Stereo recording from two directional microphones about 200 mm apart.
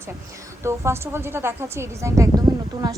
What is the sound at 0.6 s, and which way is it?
A woman's voice, 15° right (ahead or behind).